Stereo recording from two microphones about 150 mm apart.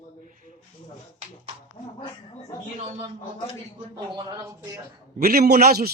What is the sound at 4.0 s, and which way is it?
Speech, 30° right (ahead or behind).